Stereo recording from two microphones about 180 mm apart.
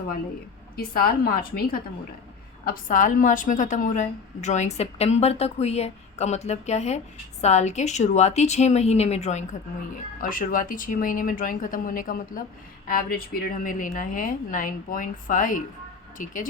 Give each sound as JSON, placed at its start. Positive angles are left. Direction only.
{"t": 0.8, "sound": "a woman's voice", "side_deg": 55}
{"t": 10.2, "sound": "a woman's voice", "side_deg": 50}